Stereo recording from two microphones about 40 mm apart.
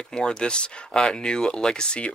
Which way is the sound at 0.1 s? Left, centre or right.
Left.